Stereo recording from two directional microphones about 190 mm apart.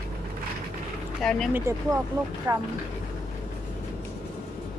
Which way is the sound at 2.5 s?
20° right (ahead or behind).